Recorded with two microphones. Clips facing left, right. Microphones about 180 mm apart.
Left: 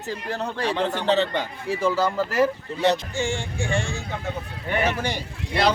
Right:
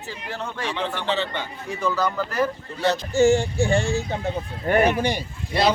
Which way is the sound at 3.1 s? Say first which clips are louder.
Right 10 dB; 40° right (ahead or behind).